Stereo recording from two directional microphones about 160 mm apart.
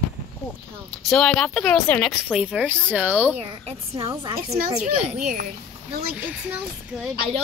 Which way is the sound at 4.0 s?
30° right (ahead or behind).